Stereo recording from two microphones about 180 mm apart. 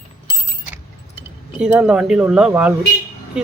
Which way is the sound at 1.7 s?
5° right (ahead or behind).